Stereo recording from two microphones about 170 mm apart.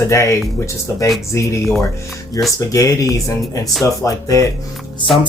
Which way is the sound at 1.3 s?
20° left (ahead or behind).